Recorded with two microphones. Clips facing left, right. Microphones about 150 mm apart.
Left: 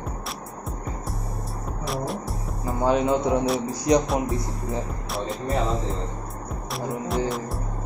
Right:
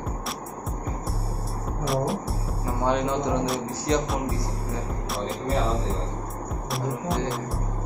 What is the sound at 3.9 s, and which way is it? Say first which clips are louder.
Music: left 5 dB; 10° left (ahead or behind).